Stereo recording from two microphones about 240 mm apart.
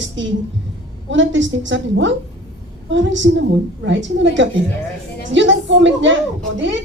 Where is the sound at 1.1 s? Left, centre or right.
Right.